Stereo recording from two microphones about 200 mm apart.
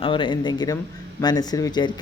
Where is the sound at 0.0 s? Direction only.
25° left (ahead or behind).